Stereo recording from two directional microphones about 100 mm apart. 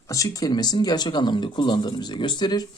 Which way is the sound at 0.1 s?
35° left (ahead or behind).